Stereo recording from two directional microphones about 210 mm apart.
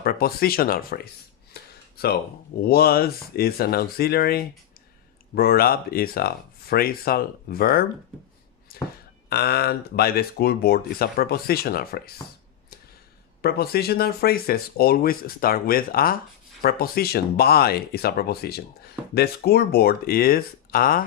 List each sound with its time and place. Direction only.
0.0 s speech: 45° left (ahead or behind)
1.5 s a sound: 50° left (ahead or behind)
2.0 s speech: 45° left (ahead or behind)
9.3 s speech: 50° left (ahead or behind)
13.4 s speech: 50° left (ahead or behind)